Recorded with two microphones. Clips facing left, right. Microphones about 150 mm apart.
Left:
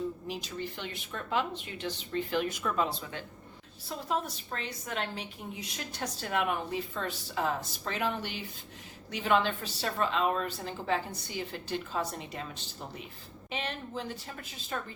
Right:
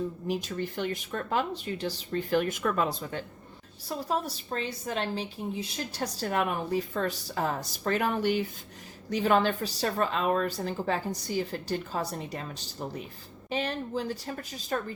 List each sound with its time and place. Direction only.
0.3 s a woman's voice: 45° right (ahead or behind)
3.8 s a woman's voice: 35° right (ahead or behind)